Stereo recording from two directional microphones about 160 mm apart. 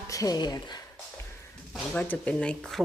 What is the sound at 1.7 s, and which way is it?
Speech, 5° left (ahead or behind).